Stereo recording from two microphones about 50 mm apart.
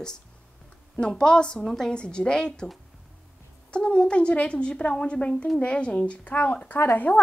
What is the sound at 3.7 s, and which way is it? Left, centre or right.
A woman's voice, centre.